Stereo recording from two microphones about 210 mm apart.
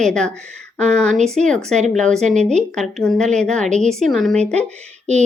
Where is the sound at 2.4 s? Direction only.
35° right (ahead or behind).